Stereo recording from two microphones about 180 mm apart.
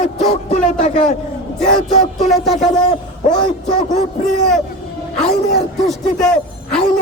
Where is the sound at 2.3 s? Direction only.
Centre (ahead or behind).